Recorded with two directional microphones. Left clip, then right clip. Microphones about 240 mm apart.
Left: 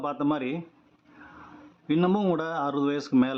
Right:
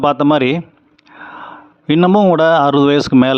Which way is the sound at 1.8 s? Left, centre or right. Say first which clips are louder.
Right 13 dB; right.